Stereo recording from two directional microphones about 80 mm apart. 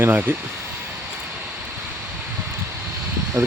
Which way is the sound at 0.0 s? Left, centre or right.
Right.